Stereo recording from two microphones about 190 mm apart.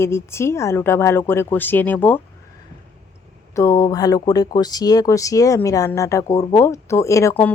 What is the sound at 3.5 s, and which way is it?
Speech, 15° left (ahead or behind).